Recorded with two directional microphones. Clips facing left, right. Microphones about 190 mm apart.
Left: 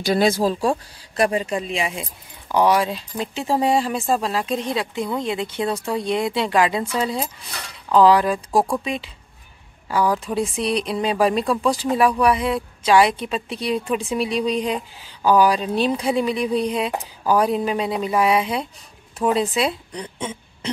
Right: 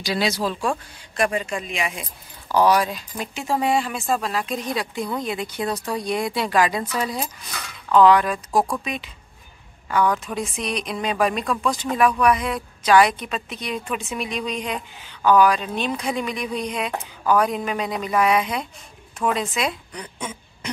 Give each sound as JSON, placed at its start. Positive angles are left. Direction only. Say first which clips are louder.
{"t": 0.0, "sound": "a woman's voice", "louder": "left 5 dB", "side_deg": 50}
{"t": 10.1, "sound": "a woman's voice", "louder": "left 5 dB", "side_deg": 30}